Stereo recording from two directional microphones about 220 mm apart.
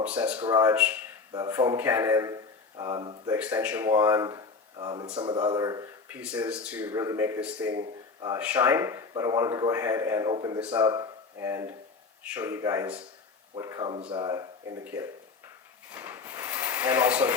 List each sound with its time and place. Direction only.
0.0 s speech: 5° right (ahead or behind)
3.3 s speech: 5° right (ahead or behind)
15.9 s a sound: 10° right (ahead or behind)